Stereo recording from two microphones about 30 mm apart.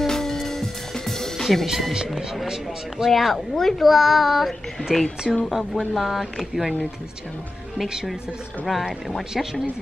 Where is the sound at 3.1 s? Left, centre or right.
Centre.